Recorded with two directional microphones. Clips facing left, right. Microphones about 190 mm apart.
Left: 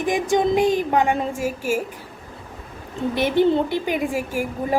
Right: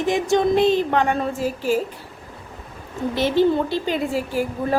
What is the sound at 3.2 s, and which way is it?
Speech, 20° left (ahead or behind).